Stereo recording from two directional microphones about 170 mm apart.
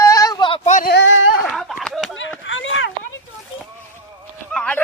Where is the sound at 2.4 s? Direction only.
90° left.